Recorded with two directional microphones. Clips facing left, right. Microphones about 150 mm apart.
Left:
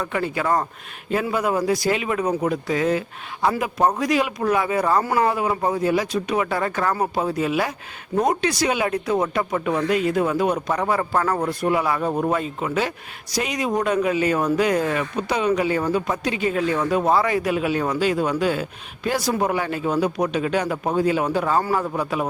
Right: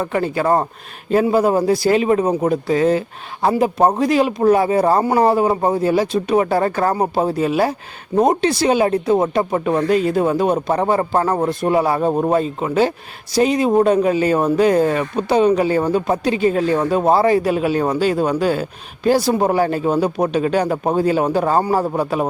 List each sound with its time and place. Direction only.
0.0 s speech: 35° right (ahead or behind)